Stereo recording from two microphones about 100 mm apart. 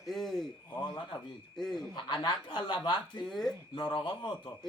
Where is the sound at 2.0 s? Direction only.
55° left (ahead or behind).